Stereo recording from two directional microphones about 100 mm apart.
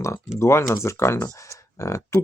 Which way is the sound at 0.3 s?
30° left (ahead or behind).